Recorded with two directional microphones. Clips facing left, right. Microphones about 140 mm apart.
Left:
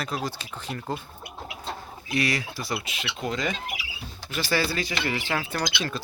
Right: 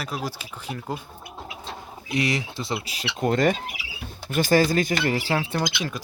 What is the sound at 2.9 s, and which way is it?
Speech, 35° right (ahead or behind).